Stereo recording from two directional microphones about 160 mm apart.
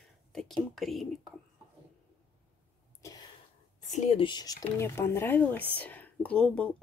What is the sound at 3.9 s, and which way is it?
Speech, 45° left (ahead or behind).